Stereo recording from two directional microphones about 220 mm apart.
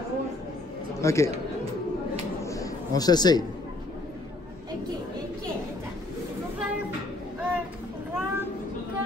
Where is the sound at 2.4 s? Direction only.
15° left (ahead or behind).